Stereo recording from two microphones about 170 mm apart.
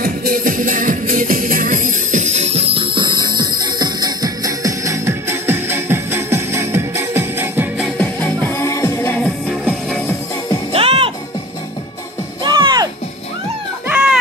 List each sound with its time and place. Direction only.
0.0 s music: 60° right (ahead or behind); by 7.9 s 10° right (ahead or behind)
8.0 s music: 10° left (ahead or behind)
9.8 s music: 5° left (ahead or behind)
10.7 s music: 35° right (ahead or behind)
12.4 s music: 25° right (ahead or behind)
13.8 s children playing: 5° right (ahead or behind)